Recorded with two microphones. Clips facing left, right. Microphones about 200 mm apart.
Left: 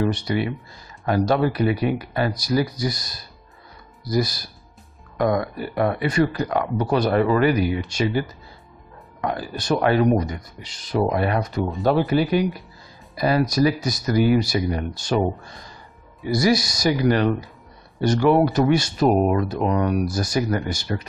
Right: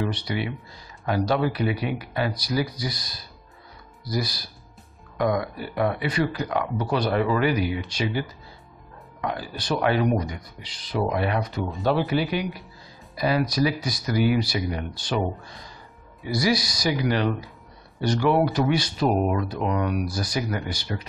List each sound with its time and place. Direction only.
0.0 s speech: 45° left (ahead or behind)
9.2 s speech: 45° left (ahead or behind)
16.3 s speech: 45° left (ahead or behind)